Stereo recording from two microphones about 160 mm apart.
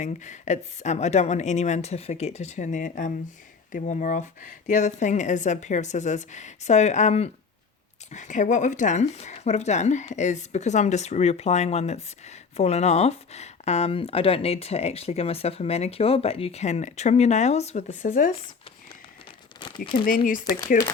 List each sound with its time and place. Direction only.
0.0 s speech: 50° left (ahead or behind)
19.5 s crumpling: 30° left (ahead or behind)
20.1 s speech: 60° left (ahead or behind)